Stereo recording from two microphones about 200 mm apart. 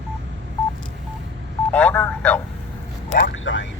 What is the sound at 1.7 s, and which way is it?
Speech, 5° left (ahead or behind).